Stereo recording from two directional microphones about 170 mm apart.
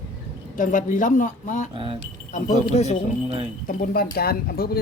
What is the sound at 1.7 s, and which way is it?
Speech, 30° right (ahead or behind).